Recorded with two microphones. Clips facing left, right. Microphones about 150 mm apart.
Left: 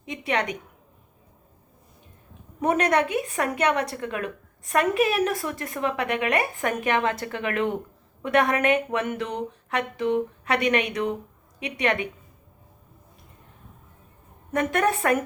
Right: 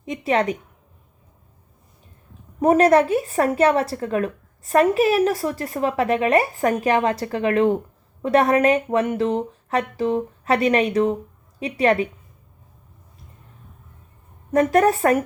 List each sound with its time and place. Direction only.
0.1 s a woman's voice: 35° right (ahead or behind)
2.6 s a woman's voice: 35° right (ahead or behind)
14.5 s a woman's voice: 35° right (ahead or behind)